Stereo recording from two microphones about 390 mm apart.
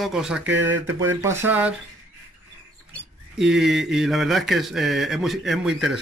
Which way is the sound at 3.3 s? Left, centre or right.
Centre.